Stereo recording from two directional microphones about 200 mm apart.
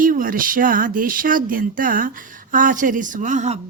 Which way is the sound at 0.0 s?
45° right (ahead or behind).